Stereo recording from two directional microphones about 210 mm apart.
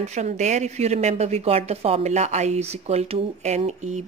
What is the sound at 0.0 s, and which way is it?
A woman's voice, 35° right (ahead or behind).